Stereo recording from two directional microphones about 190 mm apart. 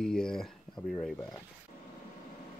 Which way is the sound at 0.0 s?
5° left (ahead or behind).